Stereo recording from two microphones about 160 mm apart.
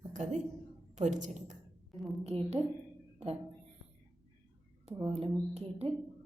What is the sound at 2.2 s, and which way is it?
Speech, 40° right (ahead or behind).